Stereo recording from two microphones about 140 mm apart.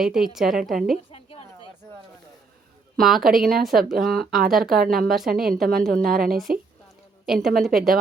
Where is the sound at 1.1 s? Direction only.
40° left (ahead or behind).